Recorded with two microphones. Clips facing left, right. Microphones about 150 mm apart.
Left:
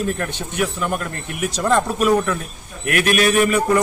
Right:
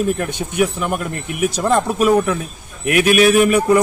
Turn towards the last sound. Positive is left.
turn(degrees=-5)  # may be behind; listen again after turning